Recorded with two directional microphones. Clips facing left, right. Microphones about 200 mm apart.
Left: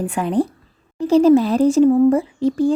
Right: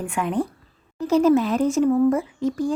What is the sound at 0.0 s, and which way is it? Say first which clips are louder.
Speech: left 5 dB; 35° left (ahead or behind).